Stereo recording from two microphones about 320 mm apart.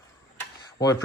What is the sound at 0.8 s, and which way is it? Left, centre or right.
Speech, centre.